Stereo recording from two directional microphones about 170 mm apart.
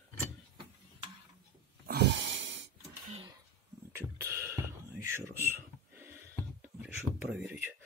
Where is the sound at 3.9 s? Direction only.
15° right (ahead or behind).